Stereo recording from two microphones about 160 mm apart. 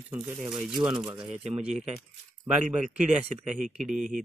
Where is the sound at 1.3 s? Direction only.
40° right (ahead or behind).